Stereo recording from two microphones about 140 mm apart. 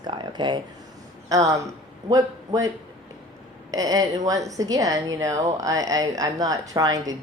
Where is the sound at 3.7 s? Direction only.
25° right (ahead or behind).